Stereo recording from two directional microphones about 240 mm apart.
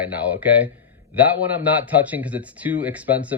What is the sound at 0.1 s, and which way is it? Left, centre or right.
Speech, centre.